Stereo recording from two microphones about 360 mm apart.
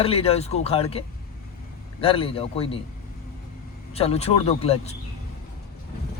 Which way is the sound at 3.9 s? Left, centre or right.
Centre.